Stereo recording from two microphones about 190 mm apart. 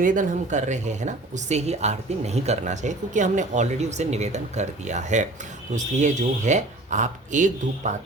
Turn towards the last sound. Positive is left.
turn(degrees=-40)  # may be behind; listen again after turning